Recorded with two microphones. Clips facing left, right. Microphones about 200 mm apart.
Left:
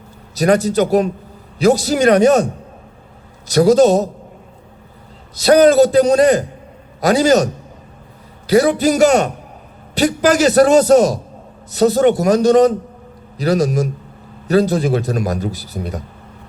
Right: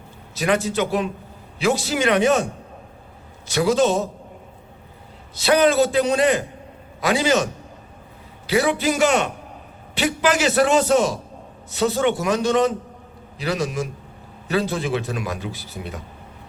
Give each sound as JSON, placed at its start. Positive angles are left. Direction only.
{"t": 0.3, "sound": "a man's voice", "side_deg": 40}
{"t": 5.3, "sound": "a man's voice", "side_deg": 40}